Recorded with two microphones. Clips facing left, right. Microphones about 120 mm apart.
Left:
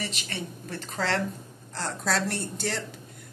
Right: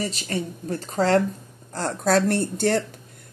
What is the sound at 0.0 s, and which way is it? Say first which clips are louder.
Speech: right 7 dB; 40° right (ahead or behind).